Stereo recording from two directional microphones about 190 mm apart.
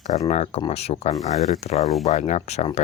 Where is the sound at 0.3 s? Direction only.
35° left (ahead or behind).